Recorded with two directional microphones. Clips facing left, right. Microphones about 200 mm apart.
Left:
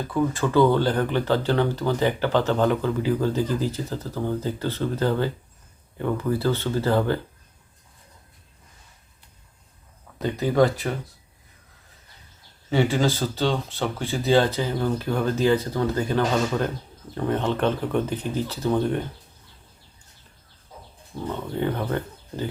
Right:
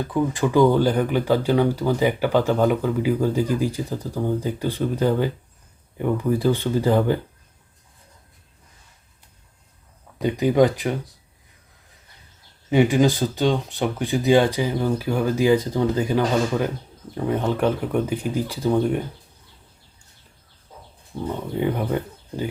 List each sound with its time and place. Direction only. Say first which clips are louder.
0.1 s speech: right 1 dB; 15° right (ahead or behind)
10.2 s speech: right 3 dB; 15° right (ahead or behind)
12.7 s speech: right 4 dB; 15° right (ahead or behind)
21.2 s speech: right 2 dB; 15° right (ahead or behind)